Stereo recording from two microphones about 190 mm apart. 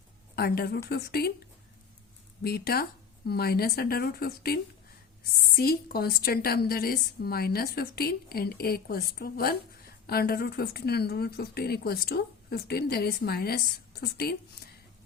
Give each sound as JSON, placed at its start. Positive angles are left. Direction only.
{"t": 0.3, "sound": "speech", "side_deg": 55}
{"t": 2.4, "sound": "a woman's voice", "side_deg": 55}